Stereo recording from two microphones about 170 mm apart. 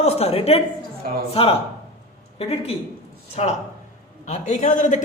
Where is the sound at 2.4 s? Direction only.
35° left (ahead or behind).